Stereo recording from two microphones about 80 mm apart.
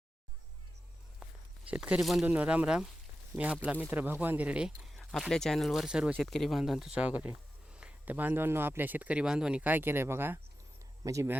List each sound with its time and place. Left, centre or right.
1.7 s speech: centre
2.2 s speech: centre
4.8 s speech: centre
6.1 s speech: centre
7.0 s speech: centre
11.0 s speech: right